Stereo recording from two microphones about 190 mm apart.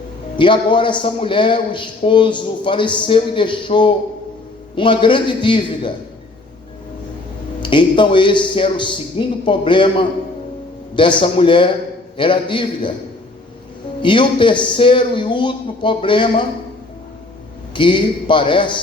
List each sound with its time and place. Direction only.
0.3 s a man's voice: 25° left (ahead or behind)
7.6 s a man's voice: 25° left (ahead or behind)
14.0 s a man's voice: 25° left (ahead or behind)
17.7 s a man's voice: 25° left (ahead or behind)